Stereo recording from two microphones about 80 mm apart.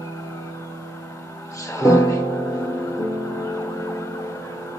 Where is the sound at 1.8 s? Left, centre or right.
Left.